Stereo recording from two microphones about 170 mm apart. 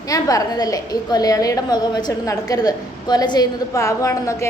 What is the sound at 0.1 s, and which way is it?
A woman's voice, 20° left (ahead or behind).